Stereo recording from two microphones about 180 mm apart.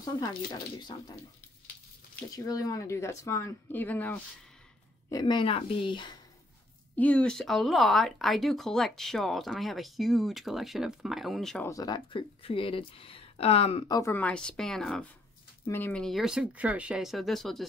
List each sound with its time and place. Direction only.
0.2 s speech: 25° left (ahead or behind)
2.3 s speech: 20° left (ahead or behind)
5.1 s speech: 25° left (ahead or behind)
7.0 s speech: 5° left (ahead or behind)
11.6 s speech: 20° left (ahead or behind)
13.8 s speech: 15° left (ahead or behind); by 17.6 s centre (ahead or behind)